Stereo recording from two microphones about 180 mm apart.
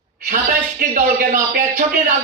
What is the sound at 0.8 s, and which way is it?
A man's voice, 50° right (ahead or behind).